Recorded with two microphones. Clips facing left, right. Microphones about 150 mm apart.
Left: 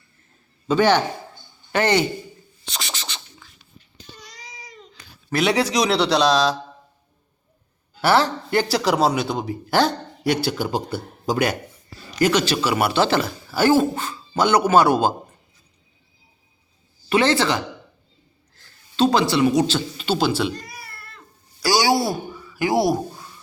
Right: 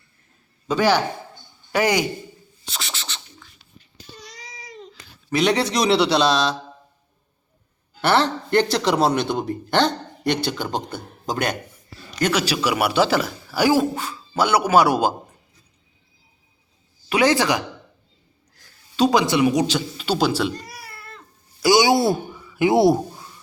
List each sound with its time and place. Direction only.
0.7 s a man's voice: 10° right (ahead or behind)
2.6 s scratch: centre (ahead or behind)
5.3 s speech: 5° left (ahead or behind)
8.0 s speech: centre (ahead or behind)
12.3 s a man's voice: 10° right (ahead or behind)
17.1 s a man's voice: 10° right (ahead or behind)
18.5 s a sound: 10° right (ahead or behind)
19.5 s a man's voice: 15° right (ahead or behind)
20.0 s speech: centre (ahead or behind)
21.6 s speech: 20° right (ahead or behind)